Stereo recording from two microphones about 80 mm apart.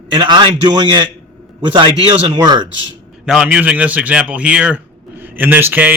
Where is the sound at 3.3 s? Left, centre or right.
Centre.